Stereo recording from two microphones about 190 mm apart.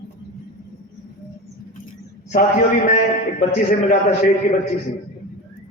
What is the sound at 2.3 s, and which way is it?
A man's voice, 45° left (ahead or behind).